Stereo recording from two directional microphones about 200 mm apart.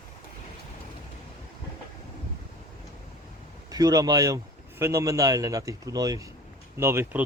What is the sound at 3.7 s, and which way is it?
A man's voice, 20° right (ahead or behind).